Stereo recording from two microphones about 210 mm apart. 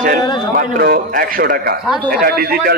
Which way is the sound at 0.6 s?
45° right (ahead or behind).